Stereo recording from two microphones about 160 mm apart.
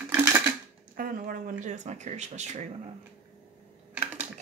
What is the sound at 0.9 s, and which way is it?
Speech, 60° right (ahead or behind).